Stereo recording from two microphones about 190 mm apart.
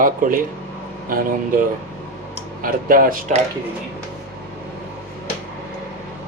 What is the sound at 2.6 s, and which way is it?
Speech, 50° right (ahead or behind).